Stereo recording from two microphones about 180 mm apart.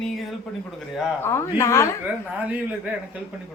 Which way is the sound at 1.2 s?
15° left (ahead or behind).